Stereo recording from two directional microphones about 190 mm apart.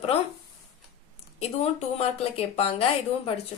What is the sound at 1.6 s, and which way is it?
A woman's voice, 35° left (ahead or behind).